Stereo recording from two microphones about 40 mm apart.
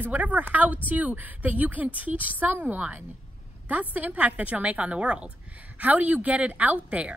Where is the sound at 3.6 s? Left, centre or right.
Right.